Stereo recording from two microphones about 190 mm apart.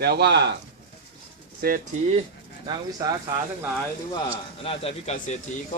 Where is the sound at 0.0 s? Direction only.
60° right (ahead or behind).